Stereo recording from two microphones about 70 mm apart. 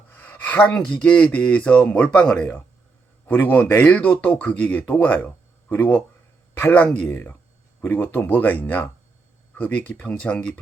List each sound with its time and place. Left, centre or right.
0.1 s speech: left